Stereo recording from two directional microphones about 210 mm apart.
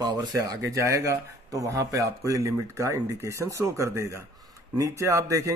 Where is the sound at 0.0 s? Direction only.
20° right (ahead or behind).